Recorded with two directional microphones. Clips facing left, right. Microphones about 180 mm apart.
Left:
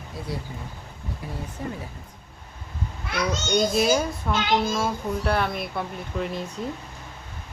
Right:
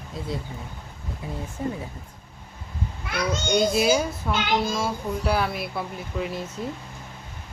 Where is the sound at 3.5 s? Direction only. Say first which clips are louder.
Right 1 dB; 5° right (ahead or behind).